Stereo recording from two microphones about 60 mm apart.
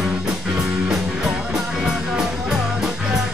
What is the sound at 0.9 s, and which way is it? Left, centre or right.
Music, centre.